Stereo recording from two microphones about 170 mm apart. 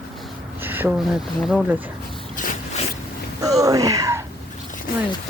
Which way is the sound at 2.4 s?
50° left (ahead or behind).